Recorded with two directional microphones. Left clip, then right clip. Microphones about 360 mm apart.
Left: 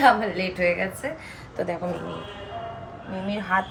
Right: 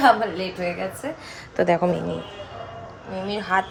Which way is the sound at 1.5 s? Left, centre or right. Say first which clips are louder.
Right 9 dB; right.